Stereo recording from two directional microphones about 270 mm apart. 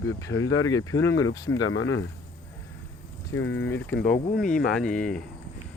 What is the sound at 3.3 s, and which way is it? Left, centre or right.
Speech, left.